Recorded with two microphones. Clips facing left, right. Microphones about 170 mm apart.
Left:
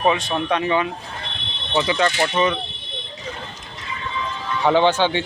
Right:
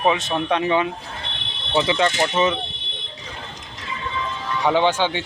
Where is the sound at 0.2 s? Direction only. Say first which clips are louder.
Even; 20° right (ahead or behind).